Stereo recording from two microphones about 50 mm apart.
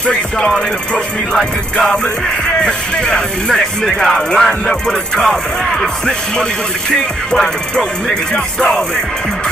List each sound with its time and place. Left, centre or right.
0.0 s music: centre
2.4 s music: centre